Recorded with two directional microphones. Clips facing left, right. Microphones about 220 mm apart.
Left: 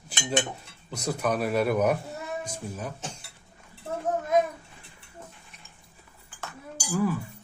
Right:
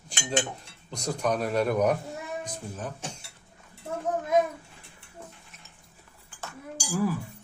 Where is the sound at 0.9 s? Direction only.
5° left (ahead or behind).